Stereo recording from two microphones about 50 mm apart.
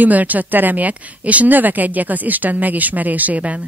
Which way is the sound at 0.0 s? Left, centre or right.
Right.